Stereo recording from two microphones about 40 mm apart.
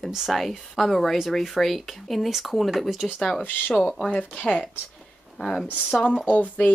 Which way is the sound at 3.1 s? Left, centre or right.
Centre.